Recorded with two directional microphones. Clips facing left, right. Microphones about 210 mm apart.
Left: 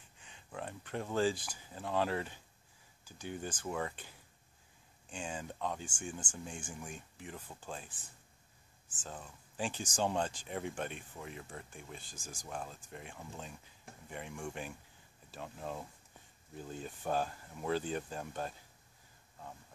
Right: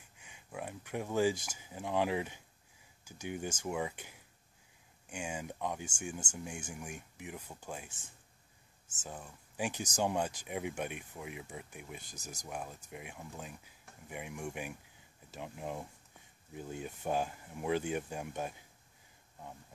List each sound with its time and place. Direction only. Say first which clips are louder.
0.2 s speech: right 1 dB; 10° right (ahead or behind)
9.0 s speech: right 1 dB; 10° right (ahead or behind)
12.2 s speech: right 1 dB; 40° right (ahead or behind)
12.4 s speech: right 1 dB; 10° right (ahead or behind)